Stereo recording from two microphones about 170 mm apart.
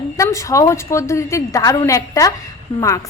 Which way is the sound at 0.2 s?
20° left (ahead or behind).